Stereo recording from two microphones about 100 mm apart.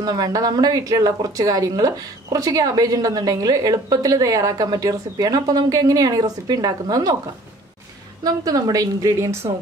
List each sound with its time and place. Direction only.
0.0 s speech: 40° right (ahead or behind)
8.2 s speech: 40° right (ahead or behind)